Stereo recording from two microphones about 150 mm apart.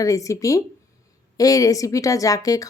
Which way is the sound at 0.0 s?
20° left (ahead or behind).